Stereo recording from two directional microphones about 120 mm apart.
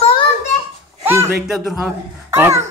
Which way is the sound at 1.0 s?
20° right (ahead or behind).